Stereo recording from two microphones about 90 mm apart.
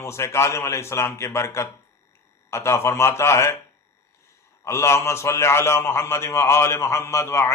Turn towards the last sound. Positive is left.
turn(degrees=30)  # may be behind; listen again after turning